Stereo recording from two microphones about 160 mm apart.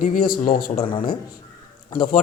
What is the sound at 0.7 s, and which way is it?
Speech, 30° left (ahead or behind).